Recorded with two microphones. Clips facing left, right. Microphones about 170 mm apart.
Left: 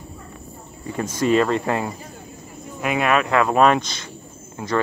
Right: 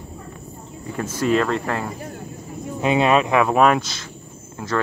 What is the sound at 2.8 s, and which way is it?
Speech, 25° right (ahead or behind).